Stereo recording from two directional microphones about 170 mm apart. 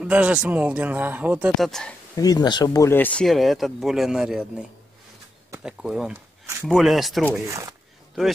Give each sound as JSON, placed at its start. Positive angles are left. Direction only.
{"t": 0.0, "sound": "speech", "side_deg": -5}
{"t": 2.1, "sound": "speech", "side_deg": 20}
{"t": 7.4, "sound": "speech", "side_deg": -20}